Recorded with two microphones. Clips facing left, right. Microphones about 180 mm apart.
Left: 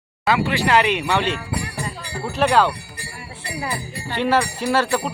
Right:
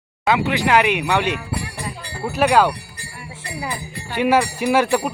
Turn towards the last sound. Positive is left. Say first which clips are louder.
# right 3 dB
turn(degrees=-15)  # may be behind; listen again after turning